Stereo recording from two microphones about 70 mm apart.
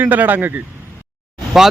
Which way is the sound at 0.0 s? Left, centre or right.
Right.